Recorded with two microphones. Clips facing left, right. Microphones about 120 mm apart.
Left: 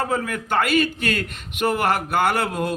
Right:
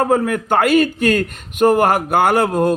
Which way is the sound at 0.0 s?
50° right (ahead or behind).